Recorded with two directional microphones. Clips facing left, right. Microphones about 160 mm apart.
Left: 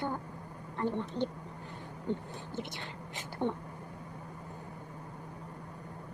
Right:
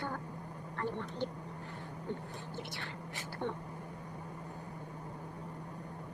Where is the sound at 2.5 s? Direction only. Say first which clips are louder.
Left 5 dB; 20° left (ahead or behind).